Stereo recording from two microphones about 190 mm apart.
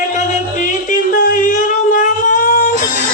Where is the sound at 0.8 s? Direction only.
45° left (ahead or behind).